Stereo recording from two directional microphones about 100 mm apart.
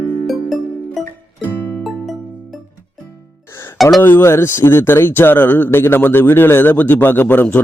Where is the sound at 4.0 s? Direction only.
20° left (ahead or behind).